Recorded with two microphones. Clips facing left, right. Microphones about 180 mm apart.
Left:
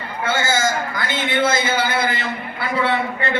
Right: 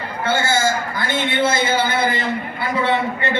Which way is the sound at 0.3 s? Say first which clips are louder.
Right 1 dB; 30° right (ahead or behind).